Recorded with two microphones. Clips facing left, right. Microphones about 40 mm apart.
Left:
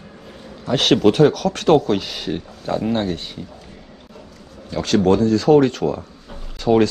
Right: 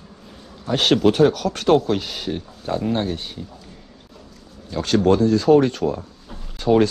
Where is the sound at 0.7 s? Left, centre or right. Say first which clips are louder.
Left 2 dB; left.